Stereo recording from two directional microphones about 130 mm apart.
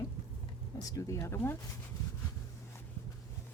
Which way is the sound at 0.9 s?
25° left (ahead or behind).